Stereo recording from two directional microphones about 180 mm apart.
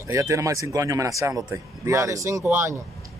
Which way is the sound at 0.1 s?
15° right (ahead or behind).